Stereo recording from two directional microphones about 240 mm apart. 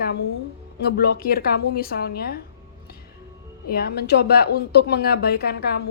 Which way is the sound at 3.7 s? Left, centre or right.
Left.